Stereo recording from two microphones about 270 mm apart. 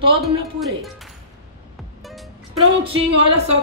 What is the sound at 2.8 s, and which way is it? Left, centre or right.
Speech, centre.